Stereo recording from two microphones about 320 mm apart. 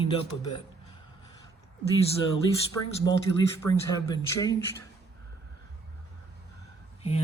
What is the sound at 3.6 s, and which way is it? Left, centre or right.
Speech, centre.